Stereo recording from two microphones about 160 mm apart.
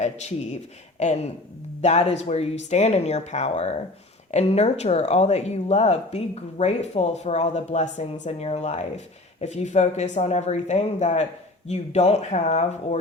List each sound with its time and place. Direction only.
0.0 s speech: 45° left (ahead or behind)